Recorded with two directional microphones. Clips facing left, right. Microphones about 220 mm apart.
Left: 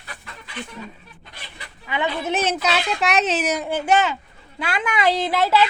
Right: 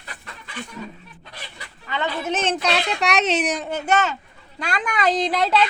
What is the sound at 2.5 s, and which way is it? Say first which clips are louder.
A woman's voice: even; 5° left (ahead or behind).